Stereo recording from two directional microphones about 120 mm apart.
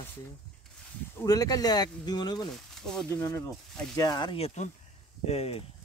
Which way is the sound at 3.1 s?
25° left (ahead or behind).